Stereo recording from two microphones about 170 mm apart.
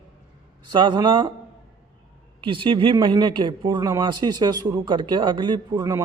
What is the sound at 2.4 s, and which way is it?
A man's voice, 30° right (ahead or behind).